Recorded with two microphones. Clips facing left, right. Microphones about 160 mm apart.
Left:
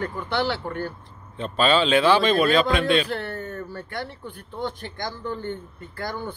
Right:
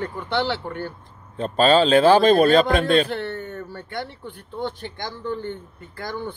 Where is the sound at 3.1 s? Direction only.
25° right (ahead or behind).